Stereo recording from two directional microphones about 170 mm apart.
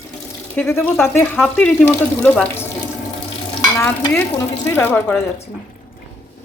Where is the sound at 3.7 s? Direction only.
15° left (ahead or behind).